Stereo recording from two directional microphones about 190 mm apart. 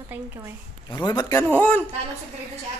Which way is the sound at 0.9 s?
20° left (ahead or behind).